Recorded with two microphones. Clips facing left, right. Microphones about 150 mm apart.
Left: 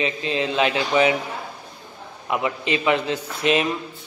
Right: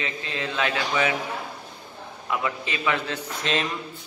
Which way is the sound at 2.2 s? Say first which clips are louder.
Left 4 dB; 20° left (ahead or behind).